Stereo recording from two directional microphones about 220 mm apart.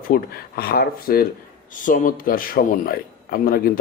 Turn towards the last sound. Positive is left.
turn(degrees=40)  # may be behind; listen again after turning